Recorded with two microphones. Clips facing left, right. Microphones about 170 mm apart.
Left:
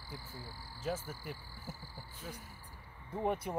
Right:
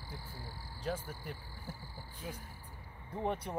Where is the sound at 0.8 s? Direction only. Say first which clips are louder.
Even; 5° left (ahead or behind).